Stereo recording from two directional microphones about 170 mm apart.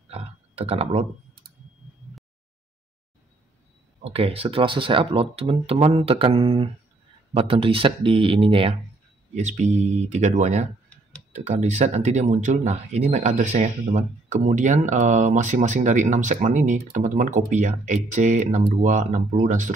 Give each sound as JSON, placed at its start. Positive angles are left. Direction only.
{"t": 0.1, "sound": "a sound", "side_deg": -35}
{"t": 4.0, "sound": "speech", "side_deg": -35}
{"t": 9.3, "sound": "speech", "side_deg": -45}